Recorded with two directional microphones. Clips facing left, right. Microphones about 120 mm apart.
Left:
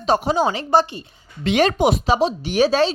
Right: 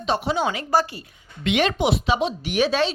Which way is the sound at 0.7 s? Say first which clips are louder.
Left 3 dB; 25° left (ahead or behind).